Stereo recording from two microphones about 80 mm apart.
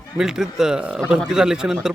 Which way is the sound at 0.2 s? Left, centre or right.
Centre.